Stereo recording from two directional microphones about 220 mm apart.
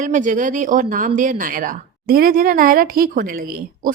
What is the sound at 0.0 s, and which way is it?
A woman's voice, 35° right (ahead or behind).